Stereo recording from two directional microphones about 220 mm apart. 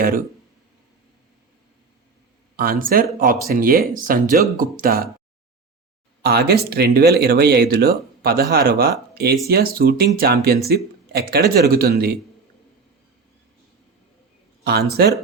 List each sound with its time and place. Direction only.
2.6 s speech: 40° right (ahead or behind)
6.2 s speech: 45° right (ahead or behind)
14.6 s speech: 45° right (ahead or behind)